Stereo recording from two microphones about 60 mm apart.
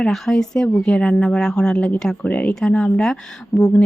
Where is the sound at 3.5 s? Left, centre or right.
Centre.